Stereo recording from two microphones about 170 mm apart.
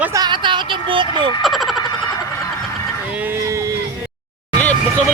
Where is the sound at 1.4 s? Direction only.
Centre (ahead or behind).